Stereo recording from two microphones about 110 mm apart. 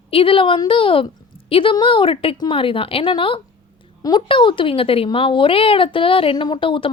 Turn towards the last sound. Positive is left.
turn(degrees=50)  # may be behind; listen again after turning